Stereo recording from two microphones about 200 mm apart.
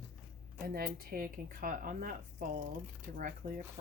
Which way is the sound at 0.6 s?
45° right (ahead or behind).